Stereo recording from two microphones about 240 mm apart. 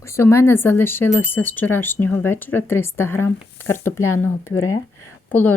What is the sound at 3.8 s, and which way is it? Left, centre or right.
Speech, left.